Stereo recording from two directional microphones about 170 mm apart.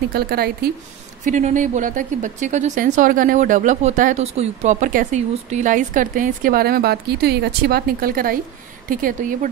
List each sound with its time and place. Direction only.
0.1 s speech: 65° right (ahead or behind)
1.2 s a woman's voice: 45° right (ahead or behind)